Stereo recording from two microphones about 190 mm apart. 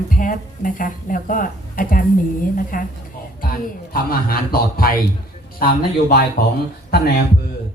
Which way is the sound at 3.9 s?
50° left (ahead or behind).